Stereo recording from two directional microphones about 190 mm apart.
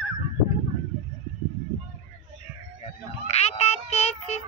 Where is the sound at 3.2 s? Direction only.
35° left (ahead or behind).